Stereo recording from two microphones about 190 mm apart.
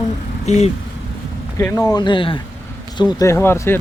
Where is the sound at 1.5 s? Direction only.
15° left (ahead or behind).